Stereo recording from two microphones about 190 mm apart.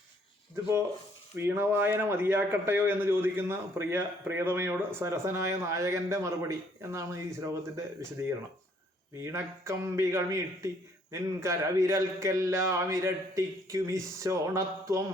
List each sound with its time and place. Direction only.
1.4 s a man's voice: 10° right (ahead or behind)
9.2 s a man's voice: 15° right (ahead or behind)